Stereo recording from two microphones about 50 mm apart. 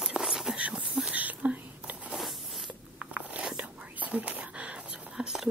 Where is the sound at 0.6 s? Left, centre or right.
Right.